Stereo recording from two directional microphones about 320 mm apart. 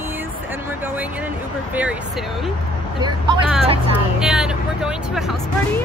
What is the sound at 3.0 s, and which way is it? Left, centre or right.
Speech, centre.